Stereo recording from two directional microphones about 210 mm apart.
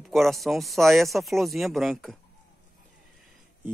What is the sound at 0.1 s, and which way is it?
Speech, centre (ahead or behind).